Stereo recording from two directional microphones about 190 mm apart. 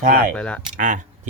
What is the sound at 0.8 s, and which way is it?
Speech, 40° right (ahead or behind).